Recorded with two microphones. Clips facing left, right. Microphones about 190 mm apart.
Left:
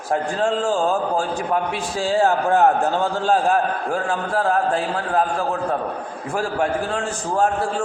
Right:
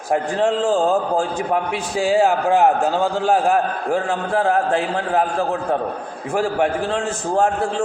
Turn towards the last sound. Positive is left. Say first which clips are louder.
# right 2 dB
turn(degrees=-20)  # may be behind; listen again after turning